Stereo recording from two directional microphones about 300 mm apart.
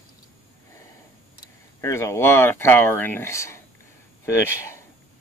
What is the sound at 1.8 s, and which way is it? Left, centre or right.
Speech, centre.